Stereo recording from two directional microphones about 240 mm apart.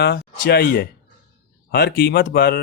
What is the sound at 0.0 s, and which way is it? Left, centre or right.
Speech, left.